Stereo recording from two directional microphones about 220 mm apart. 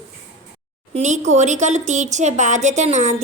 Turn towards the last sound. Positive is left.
turn(degrees=-35)  # may be behind; listen again after turning